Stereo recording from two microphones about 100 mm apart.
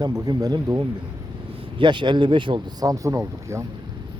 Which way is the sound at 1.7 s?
50° right (ahead or behind).